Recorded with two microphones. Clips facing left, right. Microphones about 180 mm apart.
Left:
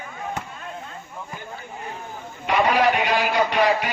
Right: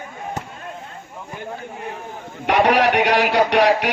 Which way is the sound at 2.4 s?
70° right (ahead or behind).